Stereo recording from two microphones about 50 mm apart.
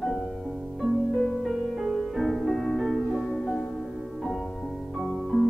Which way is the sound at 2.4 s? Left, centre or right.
Centre.